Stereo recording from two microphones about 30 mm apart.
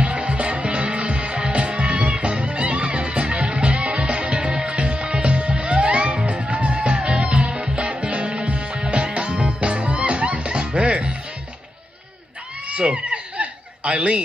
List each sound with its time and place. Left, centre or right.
0.0 s music: right
12.6 s chicken: right